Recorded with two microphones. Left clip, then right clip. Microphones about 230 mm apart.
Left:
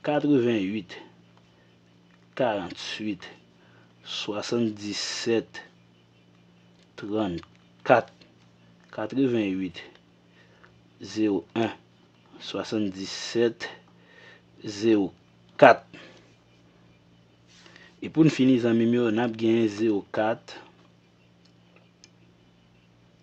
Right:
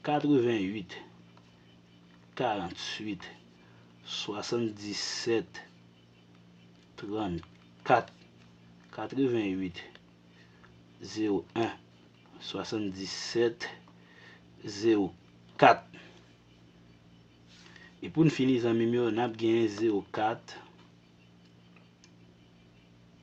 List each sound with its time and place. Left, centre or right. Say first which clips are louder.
0.0 s speech: left 4 dB; left
2.3 s speech: left 5 dB; left
6.9 s speech: left 6 dB; left
11.0 s speech: left 5 dB; left
14.2 s a sound: left 5 dB; left
15.5 s speech: left 6 dB; left
17.7 s speech: left 6 dB; left